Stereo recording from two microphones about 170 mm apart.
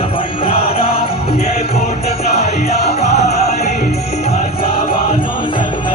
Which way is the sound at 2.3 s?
40° left (ahead or behind).